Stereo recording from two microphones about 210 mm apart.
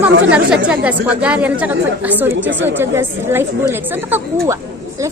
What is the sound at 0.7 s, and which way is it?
A woman's voice, 5° right (ahead or behind).